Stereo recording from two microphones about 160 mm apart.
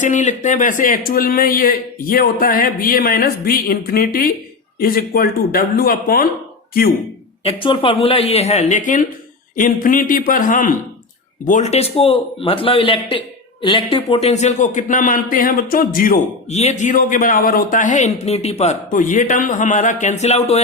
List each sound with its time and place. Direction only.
0.0 s a man's voice: 50° left (ahead or behind); by 6.2 s 70° left (ahead or behind)
7.4 s a man's voice: 35° left (ahead or behind); by 16.1 s 60° left (ahead or behind)
16.5 s a man's voice: 45° left (ahead or behind)